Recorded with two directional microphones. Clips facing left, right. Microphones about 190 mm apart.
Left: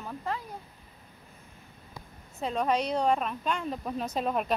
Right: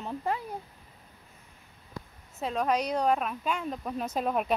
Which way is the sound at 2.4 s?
Centre (ahead or behind).